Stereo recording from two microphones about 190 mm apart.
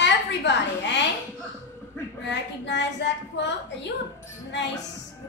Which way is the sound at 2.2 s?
70° left (ahead or behind).